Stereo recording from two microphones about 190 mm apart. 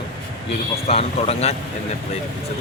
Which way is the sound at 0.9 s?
30° left (ahead or behind).